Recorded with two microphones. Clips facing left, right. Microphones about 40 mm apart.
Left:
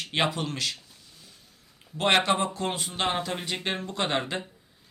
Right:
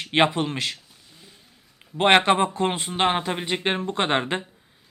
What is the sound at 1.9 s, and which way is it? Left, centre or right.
Speech, right.